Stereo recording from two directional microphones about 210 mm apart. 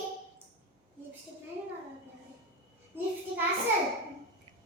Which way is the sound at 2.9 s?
10° right (ahead or behind).